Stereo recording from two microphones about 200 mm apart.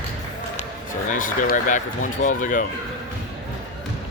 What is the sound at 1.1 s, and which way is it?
Speech, 40° left (ahead or behind).